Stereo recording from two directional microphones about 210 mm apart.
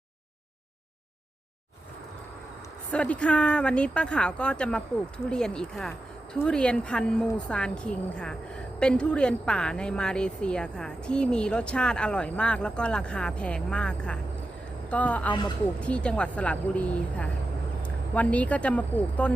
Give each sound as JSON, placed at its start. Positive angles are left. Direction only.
{"t": 2.9, "sound": "a woman's voice", "side_deg": 5}
{"t": 15.3, "sound": "speech", "side_deg": 20}
{"t": 15.8, "sound": "a woman's voice", "side_deg": 5}